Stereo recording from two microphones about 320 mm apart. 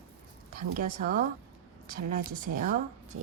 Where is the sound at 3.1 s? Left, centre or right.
Right.